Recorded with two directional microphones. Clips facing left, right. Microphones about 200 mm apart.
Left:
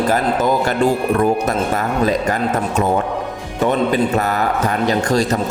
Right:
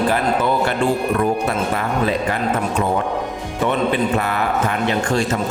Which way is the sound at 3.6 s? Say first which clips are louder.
Left 2 dB; 40° left (ahead or behind).